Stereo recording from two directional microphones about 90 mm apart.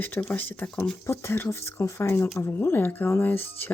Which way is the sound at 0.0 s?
20° left (ahead or behind).